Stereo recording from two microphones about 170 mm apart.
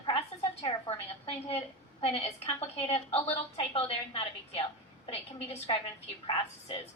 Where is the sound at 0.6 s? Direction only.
35° left (ahead or behind).